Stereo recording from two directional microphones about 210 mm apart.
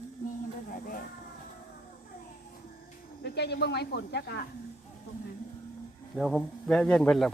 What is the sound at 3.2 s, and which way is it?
Speech, 50° left (ahead or behind).